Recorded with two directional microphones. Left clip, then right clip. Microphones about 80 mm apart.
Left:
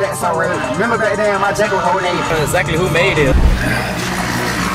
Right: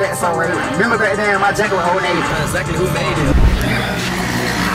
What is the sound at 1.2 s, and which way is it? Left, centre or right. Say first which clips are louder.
Speech: even; right.